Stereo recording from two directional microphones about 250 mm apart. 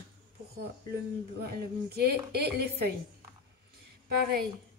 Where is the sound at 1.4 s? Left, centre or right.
Right.